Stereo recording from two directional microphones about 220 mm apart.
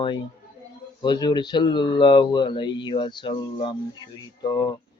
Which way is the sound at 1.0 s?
20° left (ahead or behind).